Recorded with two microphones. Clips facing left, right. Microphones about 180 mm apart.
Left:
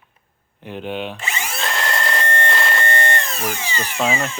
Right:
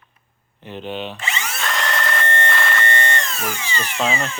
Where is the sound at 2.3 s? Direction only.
40° left (ahead or behind).